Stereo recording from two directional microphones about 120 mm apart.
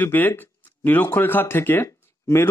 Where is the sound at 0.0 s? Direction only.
15° left (ahead or behind).